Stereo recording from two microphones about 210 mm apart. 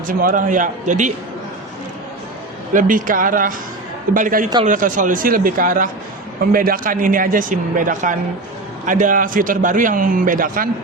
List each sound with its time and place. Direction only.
0.1 s a man's voice: 45° right (ahead or behind)
2.7 s a man's voice: 40° right (ahead or behind)